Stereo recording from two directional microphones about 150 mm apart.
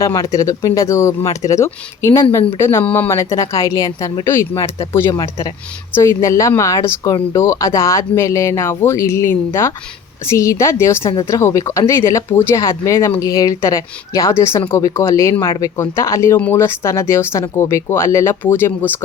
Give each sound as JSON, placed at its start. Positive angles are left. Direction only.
{"t": 0.0, "sound": "speech", "side_deg": 20}